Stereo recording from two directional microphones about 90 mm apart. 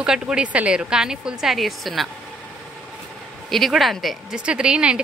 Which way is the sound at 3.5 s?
Centre (ahead or behind).